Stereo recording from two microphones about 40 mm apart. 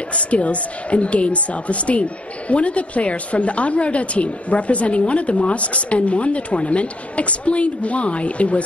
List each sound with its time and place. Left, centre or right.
0.1 s a woman's voice: left